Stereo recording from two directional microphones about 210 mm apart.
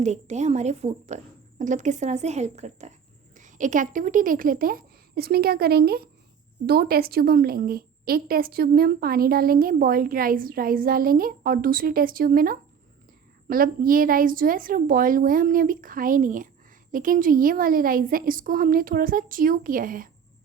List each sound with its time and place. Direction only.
0.0 s a woman's voice: 35° right (ahead or behind)